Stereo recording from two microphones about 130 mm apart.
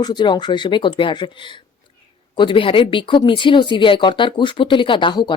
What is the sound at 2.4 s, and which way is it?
Speech, 40° left (ahead or behind).